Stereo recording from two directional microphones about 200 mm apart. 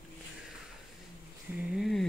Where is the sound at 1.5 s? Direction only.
Centre (ahead or behind).